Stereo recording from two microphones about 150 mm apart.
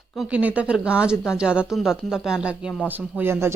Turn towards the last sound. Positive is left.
turn(degrees=-15)  # may be behind; listen again after turning